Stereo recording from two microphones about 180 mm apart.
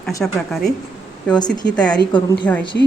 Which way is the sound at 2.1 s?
25° left (ahead or behind).